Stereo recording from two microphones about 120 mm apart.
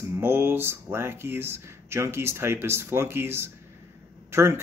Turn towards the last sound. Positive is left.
turn(degrees=-20)  # may be behind; listen again after turning